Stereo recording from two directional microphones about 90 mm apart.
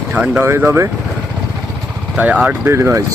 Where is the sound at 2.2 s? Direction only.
15° right (ahead or behind).